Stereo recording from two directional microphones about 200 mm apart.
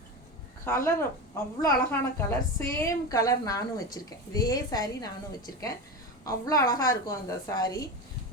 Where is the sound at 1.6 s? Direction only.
10° left (ahead or behind).